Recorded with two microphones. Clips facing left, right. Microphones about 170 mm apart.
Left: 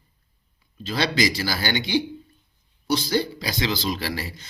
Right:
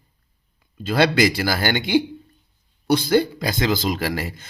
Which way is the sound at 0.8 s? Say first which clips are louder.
Right 6 dB; 55° right (ahead or behind).